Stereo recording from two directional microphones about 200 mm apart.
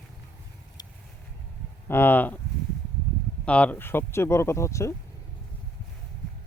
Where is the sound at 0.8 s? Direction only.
20° left (ahead or behind).